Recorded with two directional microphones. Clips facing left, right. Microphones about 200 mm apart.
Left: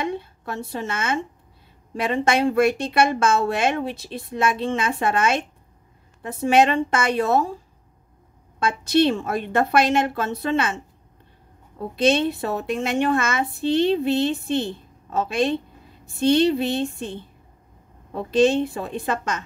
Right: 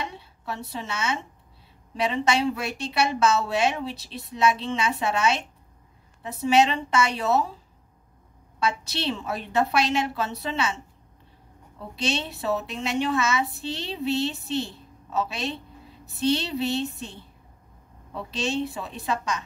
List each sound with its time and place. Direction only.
0.0 s a woman's voice: 50° left (ahead or behind)
11.9 s a woman's voice: 50° left (ahead or behind)